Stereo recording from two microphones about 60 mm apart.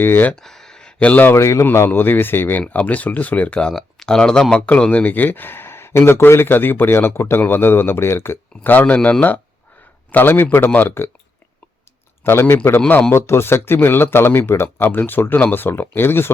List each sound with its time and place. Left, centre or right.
0.0 s speech: left
0.4 s a sound: centre
1.4 s speech: left
1.9 s speech: left
3.6 s speech: centre; by 8.4 s left
8.6 s speech: left
10.1 s speech: left
12.2 s speech: left
14.8 s speech: left